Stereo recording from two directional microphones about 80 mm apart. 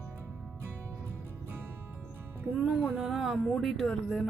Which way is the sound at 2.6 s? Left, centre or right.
Right.